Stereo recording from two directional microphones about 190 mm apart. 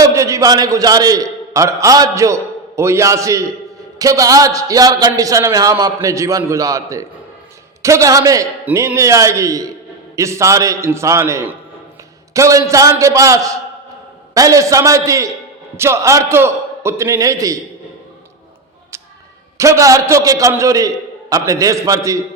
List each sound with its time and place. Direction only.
0.0 s a man's voice: 15° right (ahead or behind)
19.5 s a man's voice: 15° right (ahead or behind)